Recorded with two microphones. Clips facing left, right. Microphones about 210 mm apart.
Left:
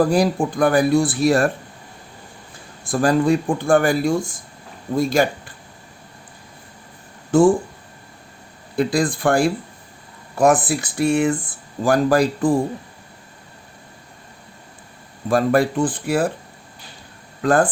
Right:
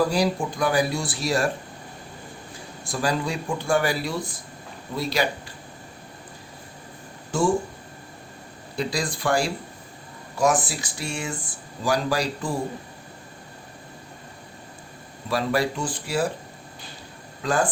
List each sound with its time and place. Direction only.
0.0 s speech: 55° left (ahead or behind)
2.8 s speech: 50° left (ahead or behind)
7.3 s speech: 55° left (ahead or behind)
8.8 s speech: 55° left (ahead or behind)
15.3 s speech: 50° left (ahead or behind)
17.4 s speech: 55° left (ahead or behind)